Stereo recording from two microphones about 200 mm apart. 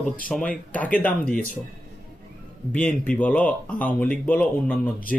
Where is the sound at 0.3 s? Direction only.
5° left (ahead or behind).